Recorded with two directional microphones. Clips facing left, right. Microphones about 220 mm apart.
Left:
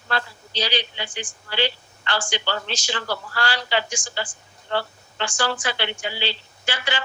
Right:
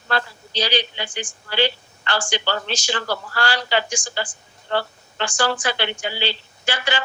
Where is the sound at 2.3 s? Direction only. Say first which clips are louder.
Right 3 dB; 45° right (ahead or behind).